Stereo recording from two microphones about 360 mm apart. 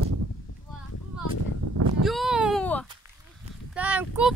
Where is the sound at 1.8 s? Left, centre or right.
Right.